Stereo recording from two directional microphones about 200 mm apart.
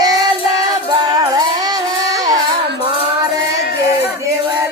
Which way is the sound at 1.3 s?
20° right (ahead or behind).